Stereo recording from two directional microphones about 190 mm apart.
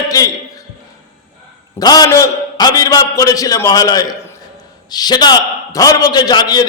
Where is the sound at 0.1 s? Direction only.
20° left (ahead or behind).